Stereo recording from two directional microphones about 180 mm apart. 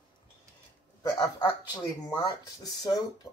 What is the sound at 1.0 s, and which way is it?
Speech, 10° left (ahead or behind).